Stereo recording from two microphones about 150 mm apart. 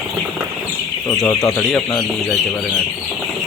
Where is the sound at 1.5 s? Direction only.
5° left (ahead or behind).